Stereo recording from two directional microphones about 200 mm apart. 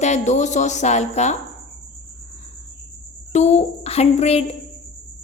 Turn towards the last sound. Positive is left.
turn(degrees=30)  # may be behind; listen again after turning